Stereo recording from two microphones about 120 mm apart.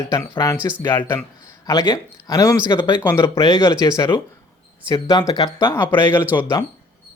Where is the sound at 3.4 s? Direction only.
35° left (ahead or behind).